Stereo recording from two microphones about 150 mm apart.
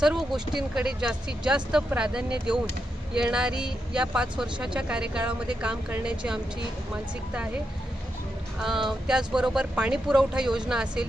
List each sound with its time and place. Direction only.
0.0 s speech: 5° right (ahead or behind)
8.5 s speech: centre (ahead or behind)